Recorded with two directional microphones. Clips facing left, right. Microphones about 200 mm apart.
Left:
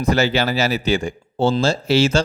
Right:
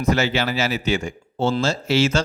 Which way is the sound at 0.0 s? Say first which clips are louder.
Left 2 dB; 35° left (ahead or behind).